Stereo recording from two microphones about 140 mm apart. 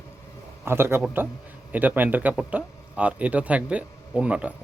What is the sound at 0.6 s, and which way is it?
A man's voice, 15° right (ahead or behind).